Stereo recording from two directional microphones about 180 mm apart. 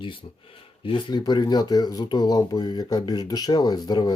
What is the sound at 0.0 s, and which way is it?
Speech, 30° left (ahead or behind).